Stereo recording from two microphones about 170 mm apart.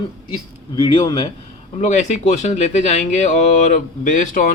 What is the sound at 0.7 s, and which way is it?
Speech, 25° left (ahead or behind).